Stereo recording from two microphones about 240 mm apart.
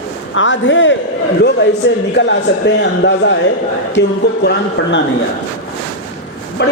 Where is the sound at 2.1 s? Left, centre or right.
Left.